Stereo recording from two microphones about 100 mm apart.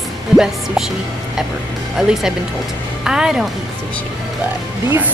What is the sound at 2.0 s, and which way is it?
Speech, 5° right (ahead or behind).